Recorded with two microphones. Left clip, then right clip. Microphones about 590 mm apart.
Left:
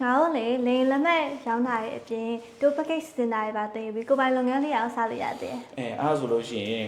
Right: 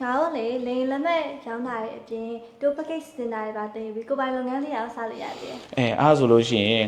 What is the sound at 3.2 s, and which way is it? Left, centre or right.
A woman's voice, left.